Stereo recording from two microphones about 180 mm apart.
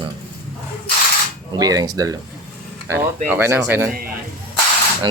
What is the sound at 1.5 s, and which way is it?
Speech, 20° right (ahead or behind).